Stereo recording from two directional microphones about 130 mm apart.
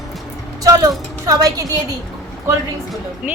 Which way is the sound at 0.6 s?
25° right (ahead or behind).